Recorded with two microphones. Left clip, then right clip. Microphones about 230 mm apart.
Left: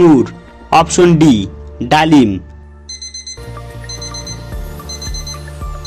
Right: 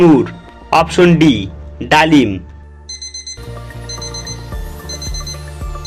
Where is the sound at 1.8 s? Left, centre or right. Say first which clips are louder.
Right 1 dB; left.